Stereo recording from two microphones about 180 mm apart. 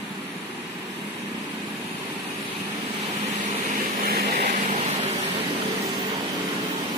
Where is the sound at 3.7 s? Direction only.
55° right (ahead or behind).